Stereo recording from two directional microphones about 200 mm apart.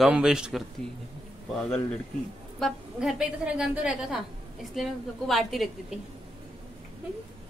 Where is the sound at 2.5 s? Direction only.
Centre (ahead or behind).